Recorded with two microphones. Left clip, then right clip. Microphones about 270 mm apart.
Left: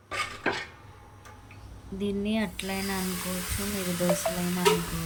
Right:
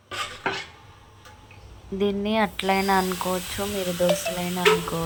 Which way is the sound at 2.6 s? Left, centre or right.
Right.